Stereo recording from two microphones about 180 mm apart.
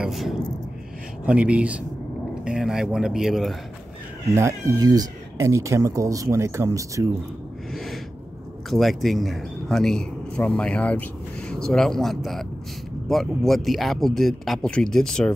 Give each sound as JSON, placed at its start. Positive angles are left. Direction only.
{"t": 0.0, "sound": "speech", "side_deg": 0}
{"t": 4.4, "sound": "speech", "side_deg": -15}
{"t": 7.7, "sound": "gasp", "side_deg": 0}
{"t": 8.6, "sound": "speech", "side_deg": 0}